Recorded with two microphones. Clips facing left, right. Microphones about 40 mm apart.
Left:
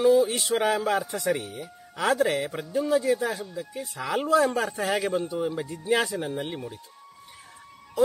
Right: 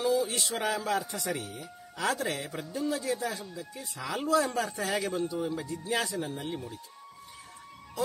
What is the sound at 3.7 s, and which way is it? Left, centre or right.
Speech, left.